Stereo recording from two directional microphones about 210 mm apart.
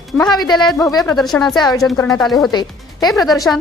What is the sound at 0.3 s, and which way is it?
Speech, 20° left (ahead or behind).